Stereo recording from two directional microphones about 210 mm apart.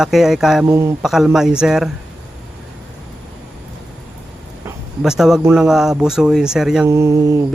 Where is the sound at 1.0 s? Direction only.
Centre (ahead or behind).